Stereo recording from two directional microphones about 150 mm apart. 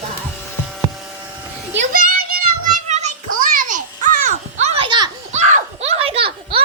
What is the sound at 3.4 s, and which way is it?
Children playing, 60° right (ahead or behind).